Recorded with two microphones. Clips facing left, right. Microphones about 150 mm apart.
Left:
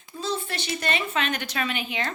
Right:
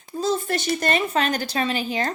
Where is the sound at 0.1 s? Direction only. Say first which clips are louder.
Right 7 dB; 45° right (ahead or behind).